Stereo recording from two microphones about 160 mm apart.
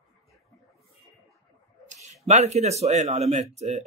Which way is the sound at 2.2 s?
45° right (ahead or behind).